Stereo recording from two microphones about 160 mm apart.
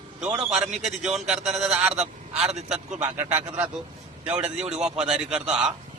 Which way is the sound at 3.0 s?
15° right (ahead or behind).